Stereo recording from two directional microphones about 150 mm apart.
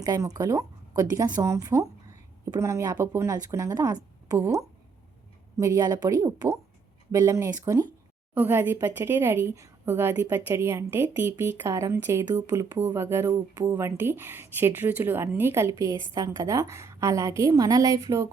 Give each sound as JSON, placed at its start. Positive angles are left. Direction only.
{"t": 0.0, "sound": "speech", "side_deg": -25}